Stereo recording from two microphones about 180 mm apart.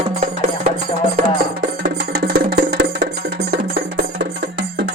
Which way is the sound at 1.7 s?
60° right (ahead or behind).